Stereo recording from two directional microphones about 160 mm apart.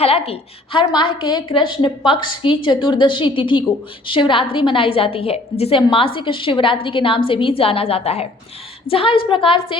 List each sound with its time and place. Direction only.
0.0 s a woman's voice: 40° left (ahead or behind)